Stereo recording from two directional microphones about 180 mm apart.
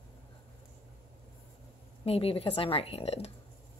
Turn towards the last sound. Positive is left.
turn(degrees=35)  # may be behind; listen again after turning